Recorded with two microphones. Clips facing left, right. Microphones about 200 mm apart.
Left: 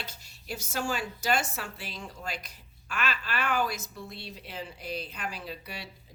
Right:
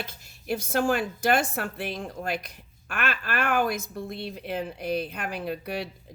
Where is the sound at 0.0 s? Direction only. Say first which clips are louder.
Right 6 dB; 55° right (ahead or behind).